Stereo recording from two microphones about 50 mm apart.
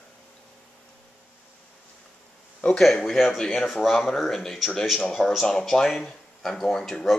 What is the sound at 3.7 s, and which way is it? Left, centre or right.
Speech, centre.